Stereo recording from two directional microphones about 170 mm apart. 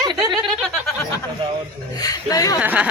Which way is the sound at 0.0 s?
25° right (ahead or behind).